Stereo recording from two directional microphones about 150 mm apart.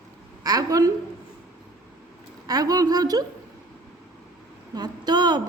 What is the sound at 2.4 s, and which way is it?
Speech, 25° right (ahead or behind).